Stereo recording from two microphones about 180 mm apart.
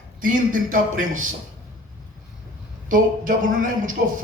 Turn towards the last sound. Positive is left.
turn(degrees=-45)  # may be behind; listen again after turning